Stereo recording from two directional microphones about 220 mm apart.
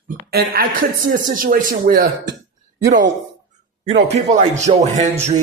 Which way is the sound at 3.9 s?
55° right (ahead or behind).